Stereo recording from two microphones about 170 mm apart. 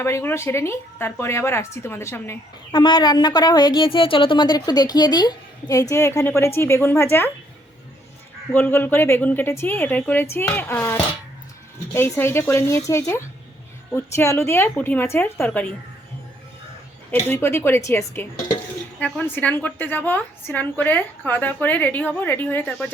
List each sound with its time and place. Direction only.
0.0 s a woman's voice: 15° left (ahead or behind)
2.7 s a woman's voice: 25° left (ahead or behind)
8.5 s a woman's voice: 10° left (ahead or behind)
17.1 s a woman's voice: 10° left (ahead or behind)
18.9 s a woman's voice: 10° left (ahead or behind)